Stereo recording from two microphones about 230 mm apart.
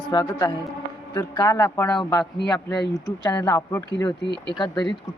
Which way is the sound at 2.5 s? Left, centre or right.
Centre.